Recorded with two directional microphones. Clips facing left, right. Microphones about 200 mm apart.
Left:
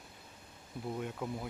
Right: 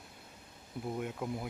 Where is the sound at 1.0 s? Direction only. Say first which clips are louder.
Right 2 dB; 10° right (ahead or behind).